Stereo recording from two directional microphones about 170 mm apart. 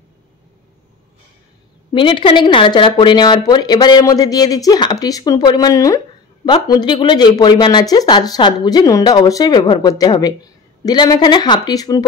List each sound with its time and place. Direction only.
1.9 s speech: 30° left (ahead or behind)